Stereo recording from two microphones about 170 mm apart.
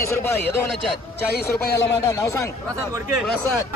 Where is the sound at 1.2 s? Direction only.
65° left (ahead or behind).